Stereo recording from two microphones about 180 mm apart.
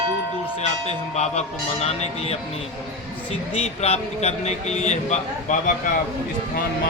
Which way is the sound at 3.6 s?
35° left (ahead or behind).